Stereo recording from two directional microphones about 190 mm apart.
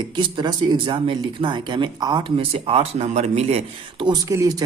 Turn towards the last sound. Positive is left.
turn(degrees=-15)  # may be behind; listen again after turning